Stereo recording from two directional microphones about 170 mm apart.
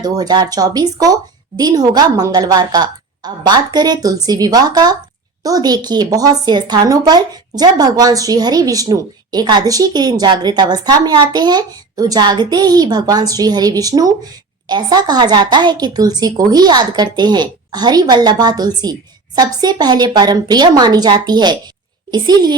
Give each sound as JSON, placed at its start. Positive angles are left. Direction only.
{"t": 0.0, "sound": "speech", "side_deg": -25}